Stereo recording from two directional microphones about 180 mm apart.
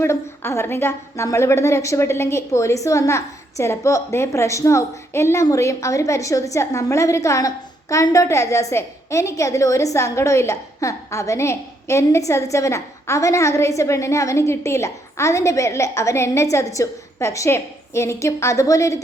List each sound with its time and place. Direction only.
0.0 s a woman's voice: 15° left (ahead or behind)